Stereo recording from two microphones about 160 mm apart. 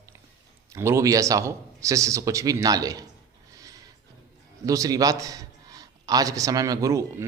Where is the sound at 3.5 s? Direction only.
20° right (ahead or behind).